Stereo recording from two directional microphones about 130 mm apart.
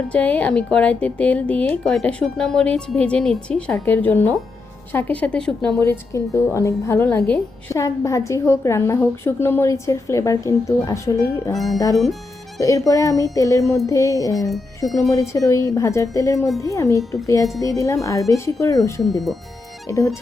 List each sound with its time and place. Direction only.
0.1 s speech: 10° left (ahead or behind)
5.8 s a woman's voice: 20° left (ahead or behind)
11.5 s speech: centre (ahead or behind)
12.5 s a woman's voice: 25° left (ahead or behind)